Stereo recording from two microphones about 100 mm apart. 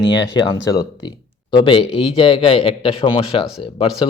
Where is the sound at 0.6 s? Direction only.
40° left (ahead or behind).